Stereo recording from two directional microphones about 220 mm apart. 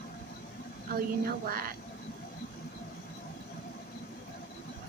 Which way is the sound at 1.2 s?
40° right (ahead or behind).